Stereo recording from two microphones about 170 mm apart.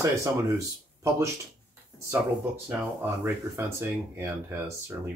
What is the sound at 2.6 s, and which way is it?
Speech, 10° right (ahead or behind).